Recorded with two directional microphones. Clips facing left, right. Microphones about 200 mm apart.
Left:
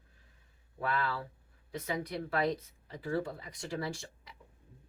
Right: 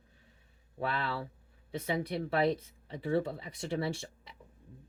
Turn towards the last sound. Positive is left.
turn(degrees=-30)  # may be behind; listen again after turning